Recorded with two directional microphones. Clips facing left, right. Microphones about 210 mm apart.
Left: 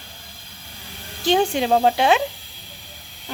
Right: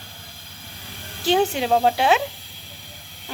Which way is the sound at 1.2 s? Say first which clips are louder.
Left 1 dB; 5° right (ahead or behind).